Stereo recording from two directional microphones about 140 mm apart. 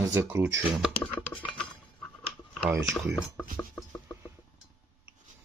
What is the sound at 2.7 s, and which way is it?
Speech, 15° right (ahead or behind).